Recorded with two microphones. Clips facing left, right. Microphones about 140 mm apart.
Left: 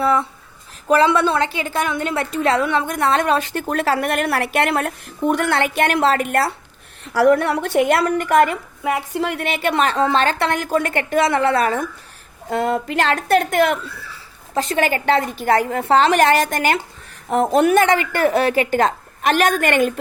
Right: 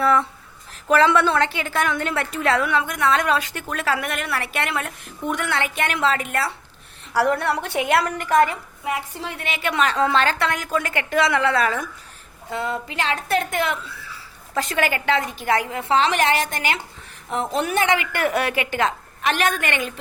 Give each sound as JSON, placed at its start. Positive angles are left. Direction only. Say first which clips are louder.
{"t": 0.0, "sound": "a woman's voice", "louder": "left 1 dB", "side_deg": 20}
{"t": 8.8, "sound": "a woman's voice", "louder": "left 7 dB", "side_deg": 70}
{"t": 9.6, "sound": "a woman's voice", "louder": "left 2 dB", "side_deg": 35}
{"t": 10.5, "sound": "a woman's voice", "louder": "left 5 dB", "side_deg": 35}
{"t": 14.5, "sound": "a woman's voice", "louder": "left 4 dB", "side_deg": 30}